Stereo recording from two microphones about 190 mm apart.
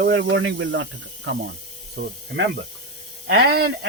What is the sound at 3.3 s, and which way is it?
Speech, 55° right (ahead or behind).